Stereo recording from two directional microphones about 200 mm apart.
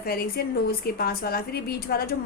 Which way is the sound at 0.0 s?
50° left (ahead or behind).